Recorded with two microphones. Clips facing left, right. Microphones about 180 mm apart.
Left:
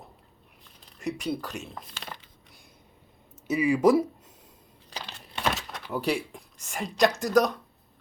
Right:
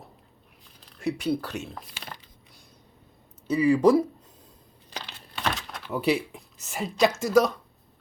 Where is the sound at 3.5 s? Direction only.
15° left (ahead or behind).